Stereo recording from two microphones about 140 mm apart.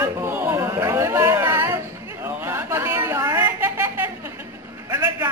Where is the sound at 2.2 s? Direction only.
15° right (ahead or behind).